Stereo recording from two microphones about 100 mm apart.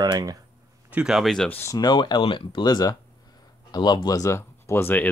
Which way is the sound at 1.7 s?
45° left (ahead or behind).